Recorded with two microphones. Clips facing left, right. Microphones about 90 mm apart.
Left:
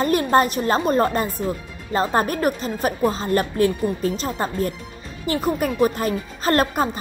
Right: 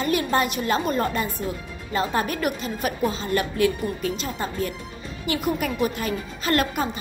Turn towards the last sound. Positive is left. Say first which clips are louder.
# left 4 dB
turn(degrees=35)  # may be behind; listen again after turning